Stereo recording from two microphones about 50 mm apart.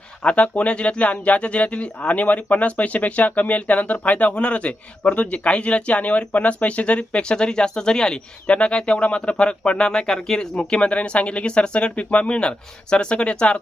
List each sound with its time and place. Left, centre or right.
0.2 s speech: left